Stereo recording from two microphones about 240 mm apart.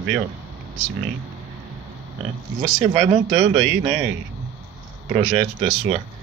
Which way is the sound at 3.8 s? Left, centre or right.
Centre.